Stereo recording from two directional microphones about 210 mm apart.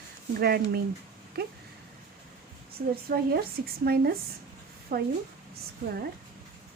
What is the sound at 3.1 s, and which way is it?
Speech, 45° right (ahead or behind).